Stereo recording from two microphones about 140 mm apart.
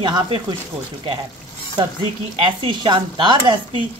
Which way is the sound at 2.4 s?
35° right (ahead or behind).